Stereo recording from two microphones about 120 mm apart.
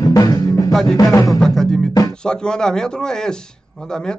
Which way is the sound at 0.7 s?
Centre (ahead or behind).